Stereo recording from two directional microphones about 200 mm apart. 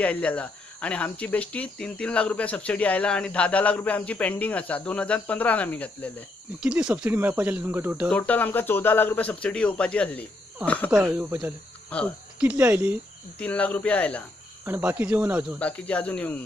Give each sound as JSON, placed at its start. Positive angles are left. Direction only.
{"t": 0.0, "sound": "speech", "side_deg": 5}
{"t": 6.6, "sound": "speech", "side_deg": -5}
{"t": 8.1, "sound": "speech", "side_deg": 10}
{"t": 10.9, "sound": "speech", "side_deg": -5}
{"t": 11.9, "sound": "speech", "side_deg": 5}
{"t": 12.4, "sound": "speech", "side_deg": -5}
{"t": 13.4, "sound": "speech", "side_deg": 5}
{"t": 14.6, "sound": "speech", "side_deg": -10}
{"t": 15.6, "sound": "speech", "side_deg": 5}